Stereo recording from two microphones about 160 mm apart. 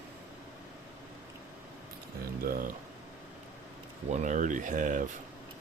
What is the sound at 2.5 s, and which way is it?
Speech, 65° right (ahead or behind).